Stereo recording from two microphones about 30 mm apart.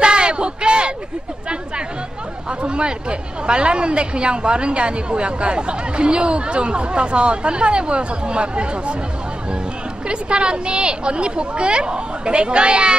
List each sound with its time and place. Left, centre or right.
0.0 s a sound: right
2.6 s a woman's voice: right
10.0 s a woman's voice: right